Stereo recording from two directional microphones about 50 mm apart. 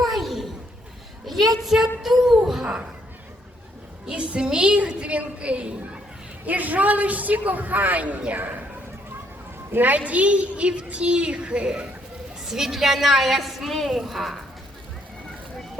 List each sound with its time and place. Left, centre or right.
0.0 s a sound: centre
1.3 s a woman's voice: centre
4.2 s a woman's voice: right
9.7 s a woman's voice: right
10.1 s a woman's voice: right
12.5 s a woman's voice: centre